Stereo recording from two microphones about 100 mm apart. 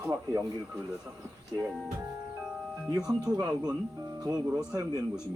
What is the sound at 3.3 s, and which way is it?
Speech, 45° right (ahead or behind).